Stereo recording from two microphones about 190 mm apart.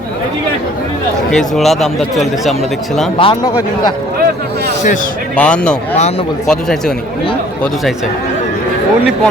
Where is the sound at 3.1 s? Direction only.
25° left (ahead or behind).